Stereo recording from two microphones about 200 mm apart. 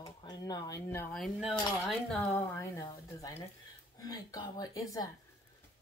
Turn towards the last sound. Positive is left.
turn(degrees=20)  # may be behind; listen again after turning